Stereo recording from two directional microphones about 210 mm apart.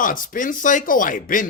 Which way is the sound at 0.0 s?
40° left (ahead or behind).